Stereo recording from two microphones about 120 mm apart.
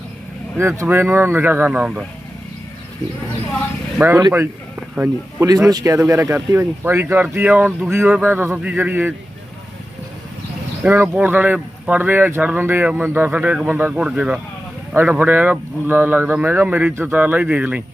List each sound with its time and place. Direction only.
0.5 s speech: 25° right (ahead or behind)
4.2 s speech: 25° right (ahead or behind)
5.5 s speech: 30° right (ahead or behind); by 9.1 s 15° right (ahead or behind)
10.8 s speech: 15° right (ahead or behind)